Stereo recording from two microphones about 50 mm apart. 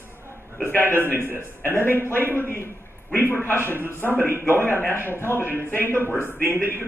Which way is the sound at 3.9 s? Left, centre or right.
Left.